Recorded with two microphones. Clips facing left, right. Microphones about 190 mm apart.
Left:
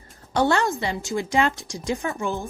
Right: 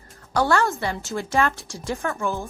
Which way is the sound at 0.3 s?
20° left (ahead or behind).